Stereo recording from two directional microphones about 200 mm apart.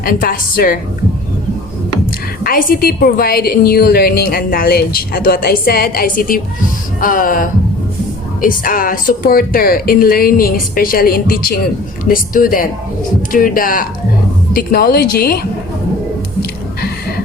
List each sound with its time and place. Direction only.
0.0 s a woman's voice: 45° left (ahead or behind)
2.4 s a woman's voice: 45° left (ahead or behind)